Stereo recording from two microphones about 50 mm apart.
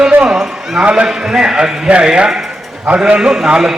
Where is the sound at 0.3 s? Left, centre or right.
Centre.